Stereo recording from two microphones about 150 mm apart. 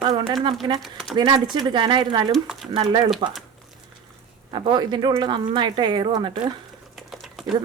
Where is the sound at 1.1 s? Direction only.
30° right (ahead or behind).